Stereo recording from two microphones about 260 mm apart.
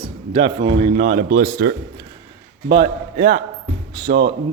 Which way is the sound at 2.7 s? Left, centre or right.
Centre.